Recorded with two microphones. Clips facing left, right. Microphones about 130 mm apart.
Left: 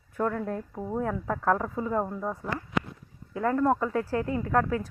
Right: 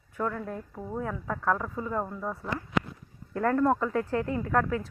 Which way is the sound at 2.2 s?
10° left (ahead or behind).